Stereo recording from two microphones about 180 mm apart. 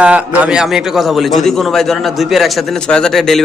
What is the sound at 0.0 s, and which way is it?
A man's voice, 5° right (ahead or behind).